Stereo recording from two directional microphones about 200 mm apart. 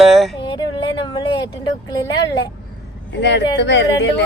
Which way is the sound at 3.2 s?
60° left (ahead or behind).